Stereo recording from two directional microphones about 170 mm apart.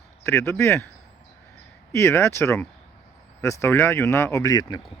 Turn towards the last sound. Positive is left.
turn(degrees=25)  # may be behind; listen again after turning